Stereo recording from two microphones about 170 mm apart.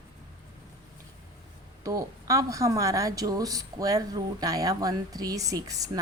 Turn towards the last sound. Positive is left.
turn(degrees=-20)  # may be behind; listen again after turning